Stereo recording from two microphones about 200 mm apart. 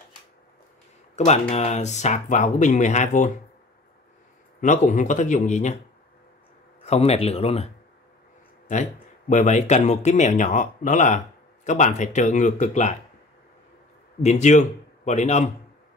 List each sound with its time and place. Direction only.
1.1 s speech: 35° left (ahead or behind)
4.6 s speech: 40° left (ahead or behind)
6.8 s speech: 30° left (ahead or behind)
9.3 s speech: 35° left (ahead or behind)
14.2 s speech: 35° left (ahead or behind)